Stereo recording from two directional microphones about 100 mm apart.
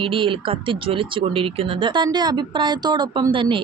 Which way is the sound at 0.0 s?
60° right (ahead or behind).